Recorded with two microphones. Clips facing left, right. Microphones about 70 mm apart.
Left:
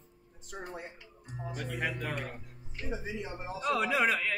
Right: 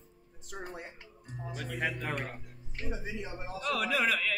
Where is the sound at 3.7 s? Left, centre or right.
Left.